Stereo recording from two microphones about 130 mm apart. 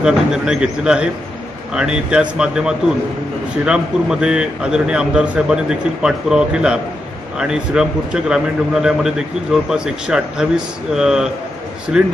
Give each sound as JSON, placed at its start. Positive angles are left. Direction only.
{"t": 0.0, "sound": "a man's voice", "side_deg": -5}